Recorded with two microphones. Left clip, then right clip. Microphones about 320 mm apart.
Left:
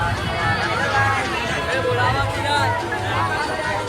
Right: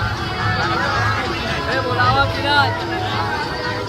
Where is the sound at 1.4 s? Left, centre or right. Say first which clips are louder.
Right 1 dB; right.